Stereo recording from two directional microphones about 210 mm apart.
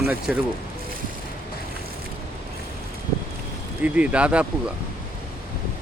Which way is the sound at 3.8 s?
5° right (ahead or behind).